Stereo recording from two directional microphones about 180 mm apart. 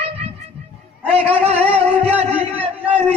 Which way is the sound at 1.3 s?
35° right (ahead or behind).